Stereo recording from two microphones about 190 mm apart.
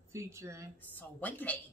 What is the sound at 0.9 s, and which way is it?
Speech, 10° left (ahead or behind).